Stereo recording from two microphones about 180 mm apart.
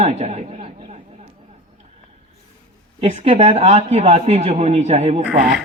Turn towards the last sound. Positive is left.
turn(degrees=-5)  # may be behind; listen again after turning